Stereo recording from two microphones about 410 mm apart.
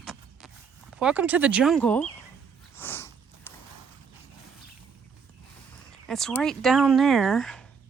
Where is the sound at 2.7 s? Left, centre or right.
Centre.